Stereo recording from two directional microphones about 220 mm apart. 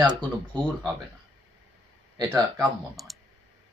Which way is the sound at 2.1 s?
15° right (ahead or behind).